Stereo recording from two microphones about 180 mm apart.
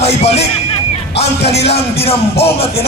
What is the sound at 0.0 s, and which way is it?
Music, 35° left (ahead or behind).